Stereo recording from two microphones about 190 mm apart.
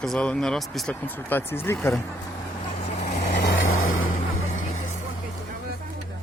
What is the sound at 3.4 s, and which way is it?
Vehicle, 85° left.